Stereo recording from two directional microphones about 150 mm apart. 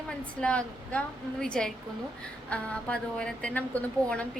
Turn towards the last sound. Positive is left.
turn(degrees=5)  # may be behind; listen again after turning